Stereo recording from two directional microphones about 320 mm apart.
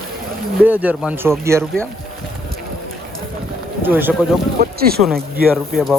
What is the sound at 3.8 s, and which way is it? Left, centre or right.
Speech, centre.